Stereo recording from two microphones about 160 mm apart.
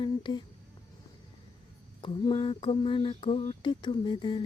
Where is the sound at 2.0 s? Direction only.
30° left (ahead or behind).